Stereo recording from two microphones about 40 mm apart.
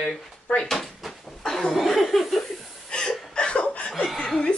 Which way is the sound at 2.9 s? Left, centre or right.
Centre.